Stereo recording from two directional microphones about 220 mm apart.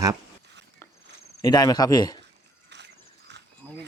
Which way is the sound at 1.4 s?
15° left (ahead or behind).